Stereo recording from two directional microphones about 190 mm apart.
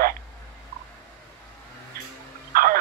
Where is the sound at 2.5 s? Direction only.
50° right (ahead or behind).